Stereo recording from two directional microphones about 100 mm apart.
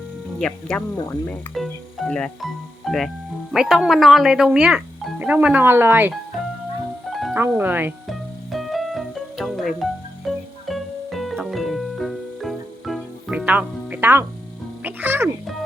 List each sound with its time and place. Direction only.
0.3 s speech: 5° left (ahead or behind)
1.0 s speech: 20° left (ahead or behind)
1.5 s speech: centre (ahead or behind); by 6.1 s 20° right (ahead or behind)
7.1 s music: centre (ahead or behind)
7.3 s speech: 25° right (ahead or behind)
8.0 s music: centre (ahead or behind)
13.3 s music: 15° right (ahead or behind)
14.8 s speech: 20° right (ahead or behind)